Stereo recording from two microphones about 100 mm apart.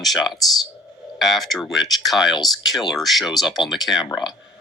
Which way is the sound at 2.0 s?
5° right (ahead or behind).